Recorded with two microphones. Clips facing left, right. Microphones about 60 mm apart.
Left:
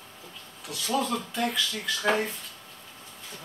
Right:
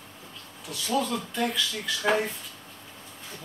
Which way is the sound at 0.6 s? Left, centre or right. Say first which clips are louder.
Even; centre.